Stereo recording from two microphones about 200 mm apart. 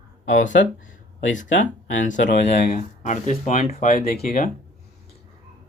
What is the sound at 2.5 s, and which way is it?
Speech, 50° left (ahead or behind).